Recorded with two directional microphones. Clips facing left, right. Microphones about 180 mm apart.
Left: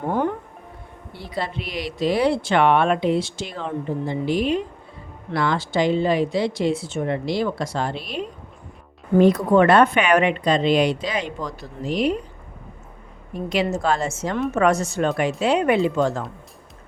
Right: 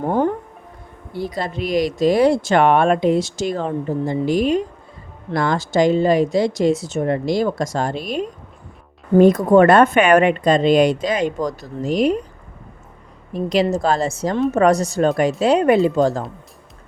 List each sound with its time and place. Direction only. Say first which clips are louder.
1.1 s speech: right 4 dB; 40° right (ahead or behind)
13.3 s a woman's voice: right 5 dB; 35° right (ahead or behind)